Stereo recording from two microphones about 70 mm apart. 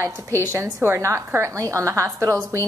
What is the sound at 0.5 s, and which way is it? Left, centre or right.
A woman's voice, right.